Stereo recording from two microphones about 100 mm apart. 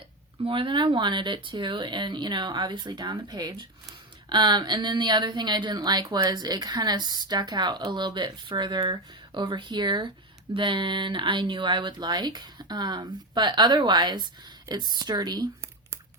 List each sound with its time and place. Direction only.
0.4 s speech: 60° right (ahead or behind); by 15.4 s 45° right (ahead or behind)